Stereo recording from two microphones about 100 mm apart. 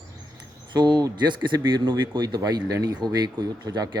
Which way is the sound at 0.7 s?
50° right (ahead or behind).